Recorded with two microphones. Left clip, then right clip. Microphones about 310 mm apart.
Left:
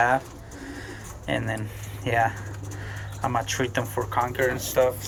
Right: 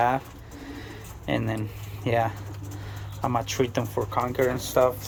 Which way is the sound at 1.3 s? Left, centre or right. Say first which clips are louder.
Even; centre.